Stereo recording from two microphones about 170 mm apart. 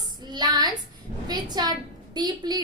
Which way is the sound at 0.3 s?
25° right (ahead or behind).